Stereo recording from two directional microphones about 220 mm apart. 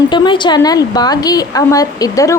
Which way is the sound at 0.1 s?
20° left (ahead or behind).